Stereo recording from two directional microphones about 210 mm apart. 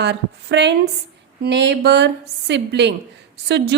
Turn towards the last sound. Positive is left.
turn(degrees=-55)  # may be behind; listen again after turning